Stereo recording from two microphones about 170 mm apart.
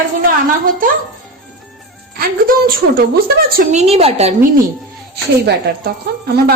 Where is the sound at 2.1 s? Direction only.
60° right (ahead or behind).